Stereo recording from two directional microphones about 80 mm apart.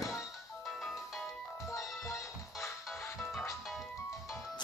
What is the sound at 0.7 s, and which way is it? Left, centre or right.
Music, centre.